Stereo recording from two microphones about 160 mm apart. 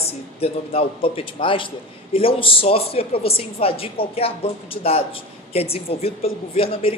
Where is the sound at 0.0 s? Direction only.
40° left (ahead or behind).